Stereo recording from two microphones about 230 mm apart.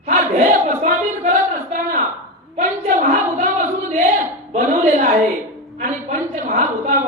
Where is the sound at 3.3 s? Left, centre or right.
Right.